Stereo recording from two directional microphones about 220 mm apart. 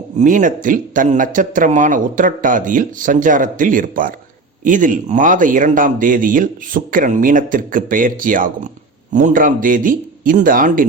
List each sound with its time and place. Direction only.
0.2 s speech: 35° right (ahead or behind)